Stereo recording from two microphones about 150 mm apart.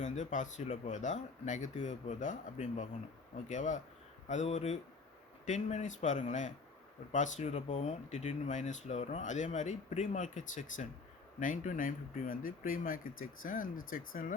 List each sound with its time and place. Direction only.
0.0 s speech: 55° left (ahead or behind)